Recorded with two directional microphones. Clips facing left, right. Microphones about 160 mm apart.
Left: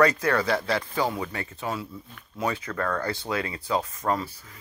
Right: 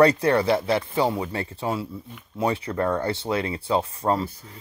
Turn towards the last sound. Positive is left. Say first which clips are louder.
# right 3 dB
turn(degrees=-30)  # may be behind; listen again after turning